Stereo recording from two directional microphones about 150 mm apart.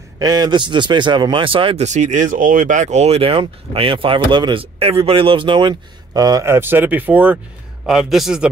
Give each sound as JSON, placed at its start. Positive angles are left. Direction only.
{"t": 0.2, "sound": "speech", "side_deg": -25}
{"t": 1.9, "sound": "a man's voice", "side_deg": -50}